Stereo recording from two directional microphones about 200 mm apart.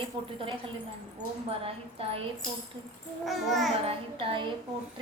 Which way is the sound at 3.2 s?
Centre (ahead or behind).